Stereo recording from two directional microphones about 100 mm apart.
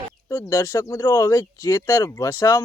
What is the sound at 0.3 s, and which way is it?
Speech, 25° left (ahead or behind).